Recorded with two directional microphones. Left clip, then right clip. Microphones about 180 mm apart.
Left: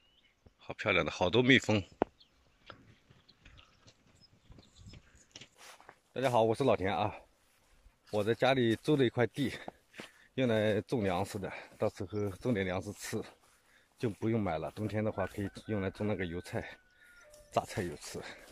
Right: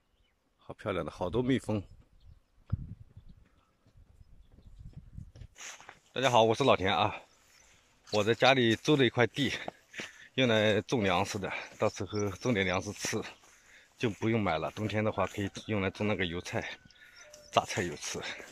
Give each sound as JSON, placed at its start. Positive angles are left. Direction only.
{"t": 0.6, "sound": "speech", "side_deg": -15}
{"t": 5.6, "sound": "a sound", "side_deg": 0}
{"t": 6.1, "sound": "speech", "side_deg": 5}